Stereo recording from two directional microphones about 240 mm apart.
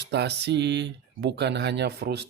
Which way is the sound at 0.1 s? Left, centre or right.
Right.